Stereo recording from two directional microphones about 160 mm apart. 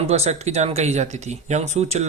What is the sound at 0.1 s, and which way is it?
Speech, 40° right (ahead or behind).